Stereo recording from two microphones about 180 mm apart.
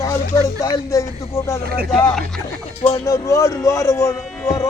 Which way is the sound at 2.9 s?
15° left (ahead or behind).